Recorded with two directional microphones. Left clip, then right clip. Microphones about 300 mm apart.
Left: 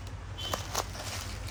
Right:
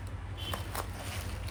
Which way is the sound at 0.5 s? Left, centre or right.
Centre.